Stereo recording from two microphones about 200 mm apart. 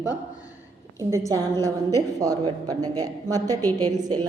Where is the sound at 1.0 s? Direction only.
15° right (ahead or behind).